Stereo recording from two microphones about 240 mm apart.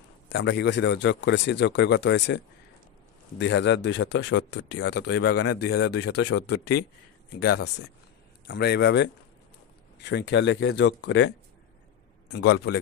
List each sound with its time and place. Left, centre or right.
0.3 s a man's voice: left
5.5 s speech: left
5.8 s a man's voice: left
11.1 s a man's voice: left